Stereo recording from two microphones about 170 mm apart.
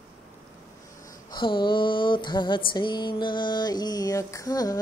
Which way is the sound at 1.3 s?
30° left (ahead or behind).